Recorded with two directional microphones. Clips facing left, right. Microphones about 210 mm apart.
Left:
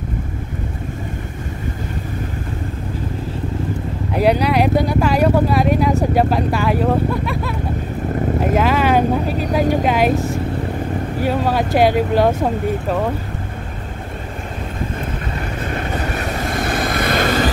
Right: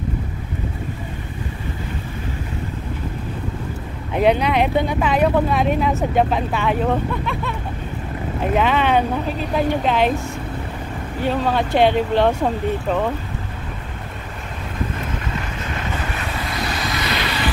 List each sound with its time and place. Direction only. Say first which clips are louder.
4.1 s speech: left 1 dB; 5° left (ahead or behind)
9.4 s speech: left 1 dB; 40° left (ahead or behind)
9.8 s speech: left 3 dB; 10° left (ahead or behind)
15.6 s vehicle: left 7 dB; 40° left (ahead or behind)